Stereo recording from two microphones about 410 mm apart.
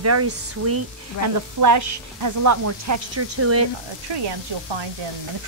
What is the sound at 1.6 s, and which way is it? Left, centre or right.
Speech, right.